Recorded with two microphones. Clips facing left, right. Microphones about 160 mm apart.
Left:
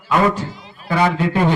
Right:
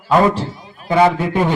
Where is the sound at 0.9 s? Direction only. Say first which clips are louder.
Right 3 dB; 20° right (ahead or behind).